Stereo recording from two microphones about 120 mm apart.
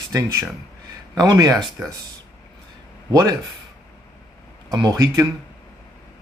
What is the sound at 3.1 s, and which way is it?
Speech, 30° right (ahead or behind).